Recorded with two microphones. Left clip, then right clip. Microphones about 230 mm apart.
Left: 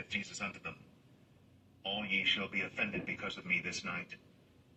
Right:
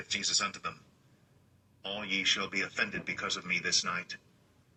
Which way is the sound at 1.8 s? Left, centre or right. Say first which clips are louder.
Right 2 dB; right.